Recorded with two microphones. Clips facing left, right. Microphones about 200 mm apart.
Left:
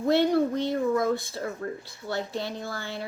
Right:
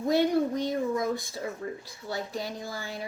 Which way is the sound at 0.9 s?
15° right (ahead or behind).